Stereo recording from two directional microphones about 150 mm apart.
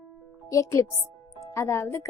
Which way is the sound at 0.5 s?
20° left (ahead or behind).